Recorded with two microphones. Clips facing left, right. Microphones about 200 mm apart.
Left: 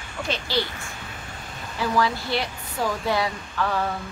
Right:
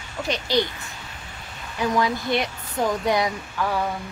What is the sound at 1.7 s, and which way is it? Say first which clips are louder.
Speech: right 1 dB; 20° right (ahead or behind).